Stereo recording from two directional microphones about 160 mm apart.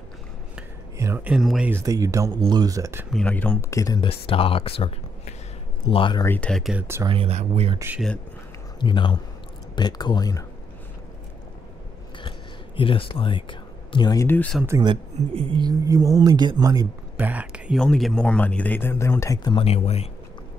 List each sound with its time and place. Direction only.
0.9 s speech: 15° right (ahead or behind)
1.3 s speech: 5° right (ahead or behind)
1.7 s speech: 20° right (ahead or behind)
3.1 s speech: 5° left (ahead or behind); by 4.1 s 20° left (ahead or behind)
4.1 s speech: 35° left (ahead or behind)
6.2 s speech: 10° left (ahead or behind); by 7.1 s 15° right (ahead or behind)
7.1 s speech: 40° right (ahead or behind)
8.7 s speech: 30° left (ahead or behind)
12.2 s a sound: 30° left (ahead or behind)
14.2 s speech: 10° left (ahead or behind)
14.7 s speech: 25° right (ahead or behind)
17.2 s speech: 10° right (ahead or behind); by 19.6 s 25° left (ahead or behind)
19.6 s speech: 40° left (ahead or behind)